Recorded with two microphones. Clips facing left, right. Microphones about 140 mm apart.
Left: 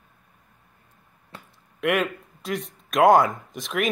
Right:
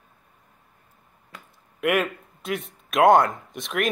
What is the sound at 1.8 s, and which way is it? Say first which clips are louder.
A man's voice: even; centre (ahead or behind).